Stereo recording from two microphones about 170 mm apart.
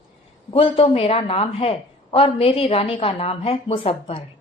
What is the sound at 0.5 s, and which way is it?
A woman's voice, 35° left (ahead or behind).